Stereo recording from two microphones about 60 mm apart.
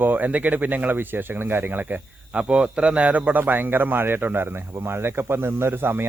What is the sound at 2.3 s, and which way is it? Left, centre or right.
Speech, centre.